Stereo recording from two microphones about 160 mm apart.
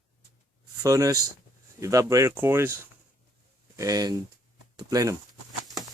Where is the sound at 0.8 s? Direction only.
20° right (ahead or behind).